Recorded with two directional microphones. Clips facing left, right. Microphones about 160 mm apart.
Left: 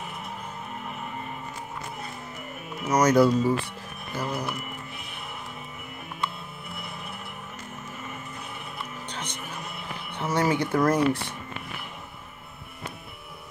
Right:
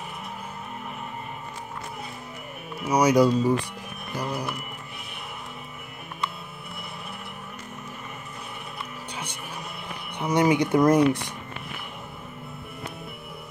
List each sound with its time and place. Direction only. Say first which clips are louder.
2.7 s speech: right 1 dB; 10° right (ahead or behind)
9.1 s music: even; 10° right (ahead or behind)
10.1 s speech: right 4 dB; 15° right (ahead or behind)